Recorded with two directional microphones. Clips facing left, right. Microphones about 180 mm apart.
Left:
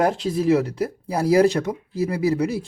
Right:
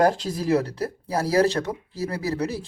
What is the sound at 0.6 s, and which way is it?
Speech, 10° left (ahead or behind).